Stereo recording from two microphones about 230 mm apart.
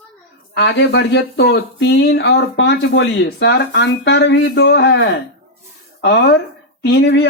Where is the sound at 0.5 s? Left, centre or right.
Left.